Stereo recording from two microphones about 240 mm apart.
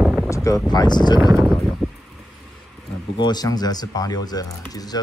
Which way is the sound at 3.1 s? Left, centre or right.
Centre.